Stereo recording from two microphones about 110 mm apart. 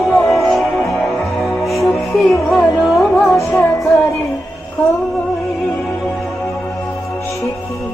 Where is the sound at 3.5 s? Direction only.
25° left (ahead or behind).